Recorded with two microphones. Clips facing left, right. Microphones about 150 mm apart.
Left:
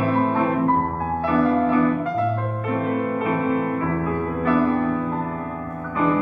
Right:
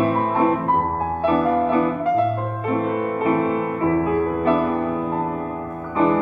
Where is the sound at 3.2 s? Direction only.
30° right (ahead or behind).